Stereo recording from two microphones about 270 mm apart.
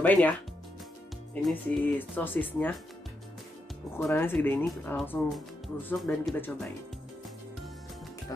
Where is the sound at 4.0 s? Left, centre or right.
Centre.